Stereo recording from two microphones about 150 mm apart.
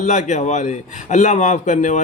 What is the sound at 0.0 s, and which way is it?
A man's voice, 55° left (ahead or behind).